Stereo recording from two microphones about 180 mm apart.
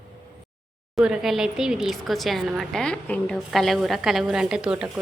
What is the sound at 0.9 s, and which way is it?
A woman's voice, 5° right (ahead or behind).